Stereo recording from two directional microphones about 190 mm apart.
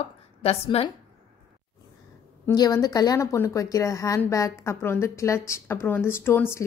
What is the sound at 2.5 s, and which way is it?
A woman's voice, 20° left (ahead or behind).